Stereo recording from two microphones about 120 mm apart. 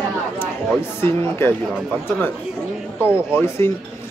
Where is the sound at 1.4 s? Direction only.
20° left (ahead or behind).